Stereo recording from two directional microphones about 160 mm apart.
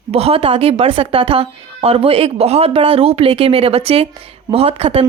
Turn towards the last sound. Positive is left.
turn(degrees=-35)  # may be behind; listen again after turning